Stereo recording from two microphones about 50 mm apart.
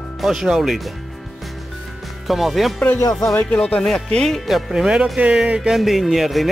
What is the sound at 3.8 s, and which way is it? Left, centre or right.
Speech, centre.